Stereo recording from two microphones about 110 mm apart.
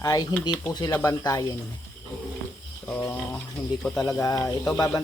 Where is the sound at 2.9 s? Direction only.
20° left (ahead or behind).